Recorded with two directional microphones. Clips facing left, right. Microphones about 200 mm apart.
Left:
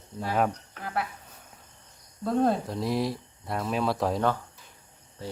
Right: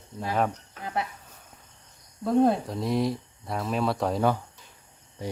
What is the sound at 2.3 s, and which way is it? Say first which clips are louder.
Speech: right 3 dB; 15° right (ahead or behind).